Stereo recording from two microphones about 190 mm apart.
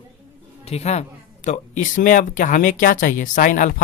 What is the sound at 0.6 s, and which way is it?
Speech, 35° left (ahead or behind).